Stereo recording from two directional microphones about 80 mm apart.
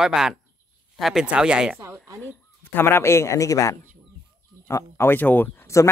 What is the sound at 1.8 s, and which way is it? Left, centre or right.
Speech, right.